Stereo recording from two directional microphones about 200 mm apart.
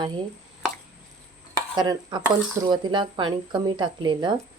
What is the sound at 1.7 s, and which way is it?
Speech, 20° right (ahead or behind).